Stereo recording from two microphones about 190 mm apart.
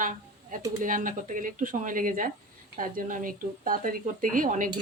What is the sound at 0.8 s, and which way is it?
Speech, 45° right (ahead or behind).